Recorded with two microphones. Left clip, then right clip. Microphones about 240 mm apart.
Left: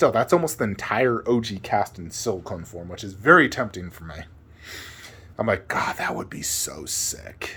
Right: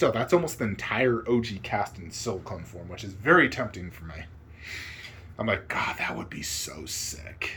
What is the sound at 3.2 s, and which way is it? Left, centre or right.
Speech, left.